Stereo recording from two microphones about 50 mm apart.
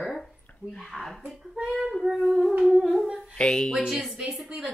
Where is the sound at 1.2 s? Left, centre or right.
Centre.